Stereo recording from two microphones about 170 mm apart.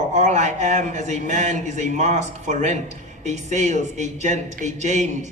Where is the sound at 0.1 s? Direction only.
45° right (ahead or behind).